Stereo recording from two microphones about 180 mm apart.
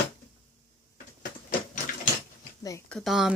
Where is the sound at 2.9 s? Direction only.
Centre (ahead or behind).